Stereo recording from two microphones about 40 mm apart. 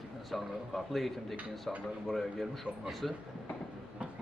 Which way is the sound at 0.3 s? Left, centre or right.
Centre.